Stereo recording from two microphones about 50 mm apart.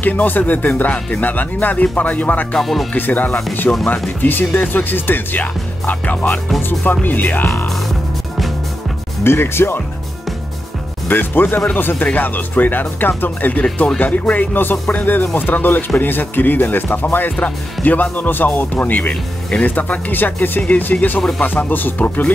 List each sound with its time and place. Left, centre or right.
0.0 s speech: left
2.6 s speech: centre
2.9 s speech: left
9.2 s speech: left
11.1 s speech: left
20.6 s speech: left